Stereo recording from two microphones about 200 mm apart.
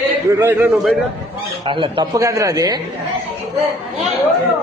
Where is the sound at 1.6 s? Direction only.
25° right (ahead or behind).